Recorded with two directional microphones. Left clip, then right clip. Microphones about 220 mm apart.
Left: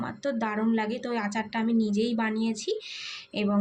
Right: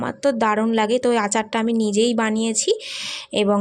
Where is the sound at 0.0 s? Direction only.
45° right (ahead or behind).